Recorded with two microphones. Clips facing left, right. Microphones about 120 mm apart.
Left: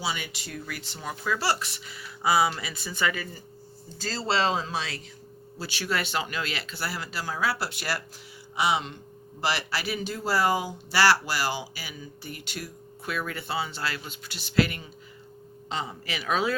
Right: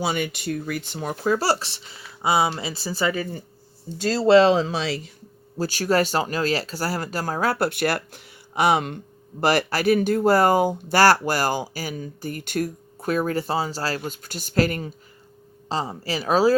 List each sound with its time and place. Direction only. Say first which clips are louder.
0.0 s speech: right 8 dB; 50° right (ahead or behind)
1.2 s speech: right 6 dB; 40° right (ahead or behind)
4.6 s speech: right 7 dB; 65° right (ahead or behind)
5.5 s speech: right 9 dB; 45° right (ahead or behind)